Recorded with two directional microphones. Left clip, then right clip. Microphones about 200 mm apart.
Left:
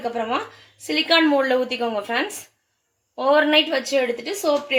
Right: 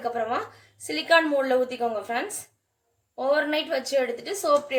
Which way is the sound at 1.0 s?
30° left (ahead or behind).